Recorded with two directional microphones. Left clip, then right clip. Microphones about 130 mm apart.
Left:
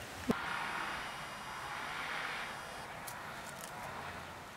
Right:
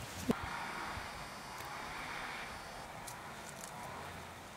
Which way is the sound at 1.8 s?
40° left (ahead or behind).